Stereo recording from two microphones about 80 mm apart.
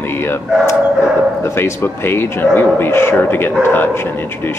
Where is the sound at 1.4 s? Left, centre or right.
Left.